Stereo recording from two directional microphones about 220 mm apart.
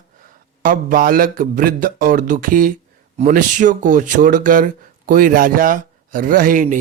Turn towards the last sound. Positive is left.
turn(degrees=-35)  # may be behind; listen again after turning